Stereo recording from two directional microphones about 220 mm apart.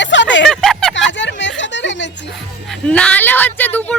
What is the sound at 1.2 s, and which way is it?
Speech, 55° left (ahead or behind).